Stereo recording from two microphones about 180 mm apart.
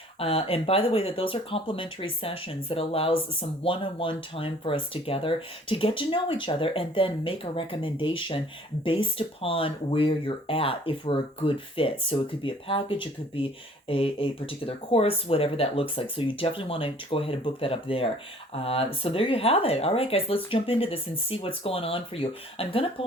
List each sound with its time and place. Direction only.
0.2 s speech: 30° left (ahead or behind)